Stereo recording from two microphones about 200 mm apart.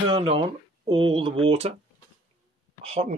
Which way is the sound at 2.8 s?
30° right (ahead or behind).